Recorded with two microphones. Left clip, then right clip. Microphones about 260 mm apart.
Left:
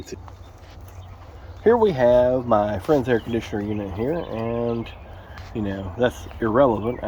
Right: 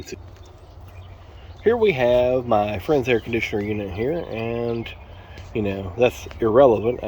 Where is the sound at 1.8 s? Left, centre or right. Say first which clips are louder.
Even; centre.